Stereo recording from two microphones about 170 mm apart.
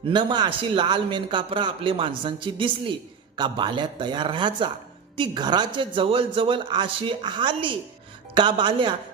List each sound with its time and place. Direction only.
0.1 s a man's voice: 25° right (ahead or behind)